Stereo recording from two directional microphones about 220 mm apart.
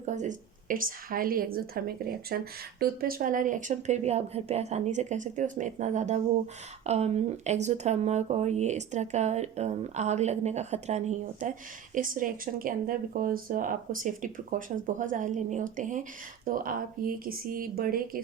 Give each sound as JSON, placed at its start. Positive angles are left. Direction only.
{"t": 0.0, "sound": "a woman's voice", "side_deg": -35}